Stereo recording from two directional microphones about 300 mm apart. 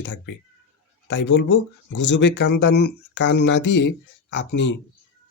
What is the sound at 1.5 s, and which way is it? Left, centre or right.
Speech, left.